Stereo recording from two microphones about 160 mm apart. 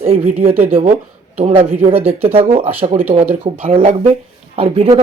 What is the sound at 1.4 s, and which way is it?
Speech, 40° right (ahead or behind).